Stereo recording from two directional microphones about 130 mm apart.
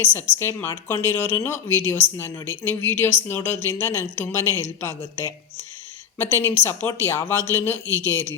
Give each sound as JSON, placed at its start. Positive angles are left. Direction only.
{"t": 0.0, "sound": "speech", "side_deg": 15}